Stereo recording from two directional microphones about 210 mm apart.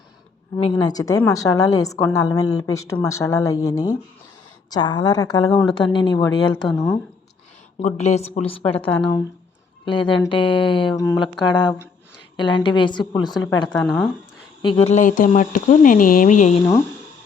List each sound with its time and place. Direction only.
0.6 s speech: 20° left (ahead or behind)
6.7 s speech: 10° left (ahead or behind)
7.8 s speech: 30° left (ahead or behind)
13.8 s speech: centre (ahead or behind)
14.6 s speech: 25° left (ahead or behind)